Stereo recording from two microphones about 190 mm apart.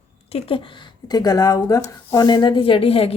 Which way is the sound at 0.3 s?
30° left (ahead or behind).